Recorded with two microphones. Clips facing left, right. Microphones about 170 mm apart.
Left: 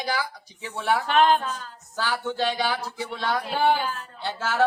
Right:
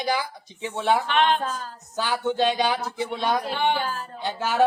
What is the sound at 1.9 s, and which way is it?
A woman's voice, 20° right (ahead or behind).